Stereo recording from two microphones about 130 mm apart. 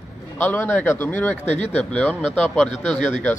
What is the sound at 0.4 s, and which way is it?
Speech, 15° left (ahead or behind).